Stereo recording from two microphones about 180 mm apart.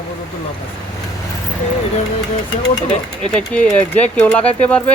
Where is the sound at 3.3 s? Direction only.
5° left (ahead or behind).